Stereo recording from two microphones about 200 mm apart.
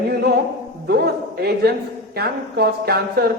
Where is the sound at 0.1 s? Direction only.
50° right (ahead or behind).